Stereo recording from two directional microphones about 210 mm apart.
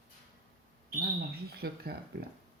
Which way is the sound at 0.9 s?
45° right (ahead or behind).